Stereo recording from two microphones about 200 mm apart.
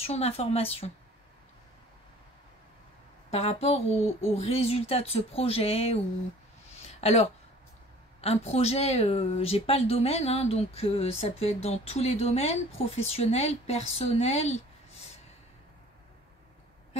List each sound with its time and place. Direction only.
0.0 s a woman's voice: 30° left (ahead or behind)
3.3 s a woman's voice: 30° left (ahead or behind)
6.9 s a sound: 30° left (ahead or behind)
8.2 s a woman's voice: 30° left (ahead or behind)